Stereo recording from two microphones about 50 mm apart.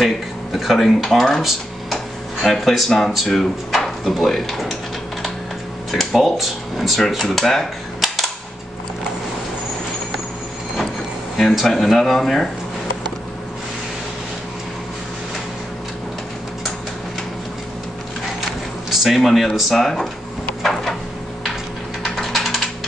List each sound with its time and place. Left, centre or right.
0.0 s speech: centre
5.9 s speech: centre
11.3 s speech: centre
18.9 s speech: centre
22.0 s ratchet: centre